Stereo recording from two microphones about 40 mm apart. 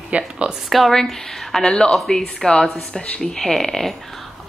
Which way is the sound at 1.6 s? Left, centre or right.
Left.